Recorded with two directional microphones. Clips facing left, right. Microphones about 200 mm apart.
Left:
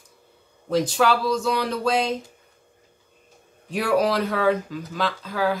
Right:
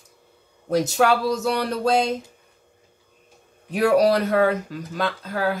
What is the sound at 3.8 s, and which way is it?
Speech, 40° right (ahead or behind).